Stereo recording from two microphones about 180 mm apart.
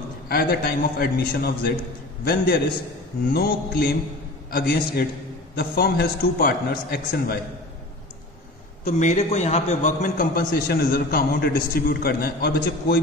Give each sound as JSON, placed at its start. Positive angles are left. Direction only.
{"t": 0.3, "sound": "a man's voice", "side_deg": 60}
{"t": 8.8, "sound": "a man's voice", "side_deg": 40}